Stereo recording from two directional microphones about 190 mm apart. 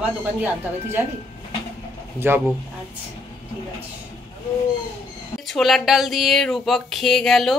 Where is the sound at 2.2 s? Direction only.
10° right (ahead or behind).